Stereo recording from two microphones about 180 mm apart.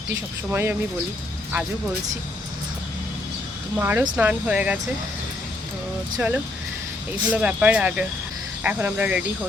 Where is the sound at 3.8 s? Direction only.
15° right (ahead or behind).